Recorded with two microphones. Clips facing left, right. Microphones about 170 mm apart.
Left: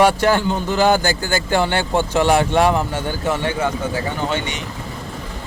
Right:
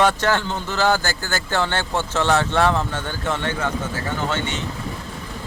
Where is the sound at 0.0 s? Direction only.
10° left (ahead or behind).